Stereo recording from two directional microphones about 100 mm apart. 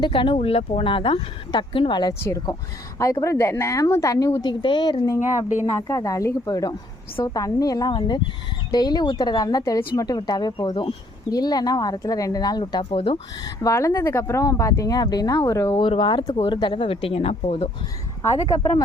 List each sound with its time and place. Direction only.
0.0 s speech: 55° left (ahead or behind)
3.0 s speech: 30° left (ahead or behind)
4.6 s speech: 50° left (ahead or behind)
5.0 s speech: 35° left (ahead or behind)
7.9 s speech: 50° left (ahead or behind)
11.3 s speech: 40° left (ahead or behind)
12.9 s speech: 65° left (ahead or behind)
13.4 s speech: 35° left (ahead or behind)
15.8 s speech: 55° left (ahead or behind); by 17.7 s 85° left